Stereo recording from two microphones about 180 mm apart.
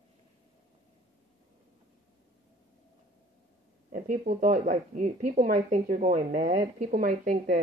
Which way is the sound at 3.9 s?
45° right (ahead or behind).